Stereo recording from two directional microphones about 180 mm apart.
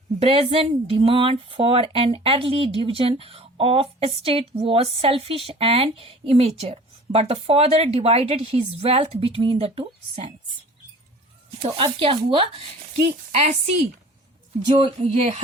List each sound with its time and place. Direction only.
0.2 s speech: 35° right (ahead or behind)
11.8 s speech: 30° right (ahead or behind)